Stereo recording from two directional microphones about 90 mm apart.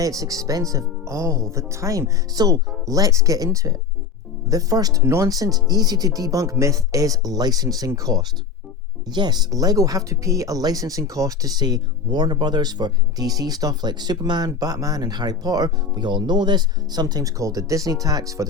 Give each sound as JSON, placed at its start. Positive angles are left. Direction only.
{"t": 0.0, "sound": "speech", "side_deg": -40}
{"t": 5.0, "sound": "speech", "side_deg": -35}
{"t": 9.0, "sound": "speech", "side_deg": -55}